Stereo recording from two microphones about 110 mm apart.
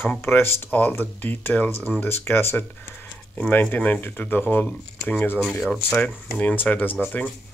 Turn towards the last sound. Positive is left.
turn(degrees=15)  # may be behind; listen again after turning